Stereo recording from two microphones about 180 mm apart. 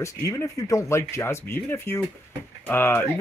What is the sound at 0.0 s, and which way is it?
Speech, 15° left (ahead or behind).